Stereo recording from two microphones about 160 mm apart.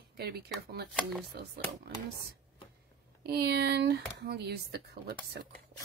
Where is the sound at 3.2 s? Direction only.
80° right.